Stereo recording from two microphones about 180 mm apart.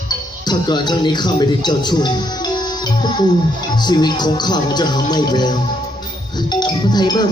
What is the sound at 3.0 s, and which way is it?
Music, 25° left (ahead or behind).